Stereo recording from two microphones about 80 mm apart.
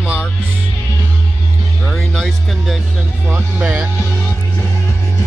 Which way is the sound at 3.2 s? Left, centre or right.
Right.